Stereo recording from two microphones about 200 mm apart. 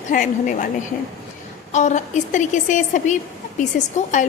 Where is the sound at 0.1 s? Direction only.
40° left (ahead or behind).